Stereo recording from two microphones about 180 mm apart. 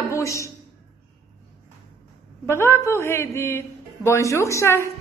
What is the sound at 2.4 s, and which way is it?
A man's voice, 15° left (ahead or behind).